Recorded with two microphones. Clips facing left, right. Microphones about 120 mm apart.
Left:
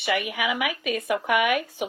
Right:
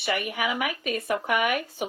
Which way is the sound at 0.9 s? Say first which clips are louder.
Left 3 dB; 55° left (ahead or behind).